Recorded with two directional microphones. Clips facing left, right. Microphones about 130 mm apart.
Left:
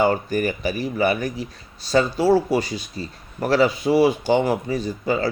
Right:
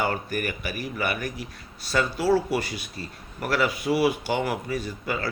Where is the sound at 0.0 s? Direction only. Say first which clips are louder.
Left 7 dB; 25° left (ahead or behind).